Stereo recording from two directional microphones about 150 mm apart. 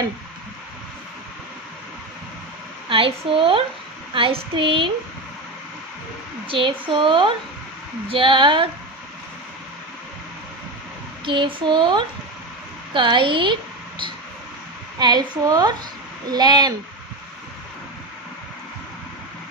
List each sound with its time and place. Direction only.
2.9 s a woman's voice: 35° right (ahead or behind)
6.4 s a woman's voice: 35° right (ahead or behind)
11.2 s a woman's voice: 35° right (ahead or behind)